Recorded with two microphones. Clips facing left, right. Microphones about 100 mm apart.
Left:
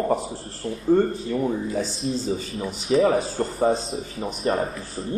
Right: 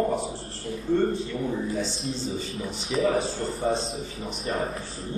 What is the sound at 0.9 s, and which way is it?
Speech, 40° left (ahead or behind).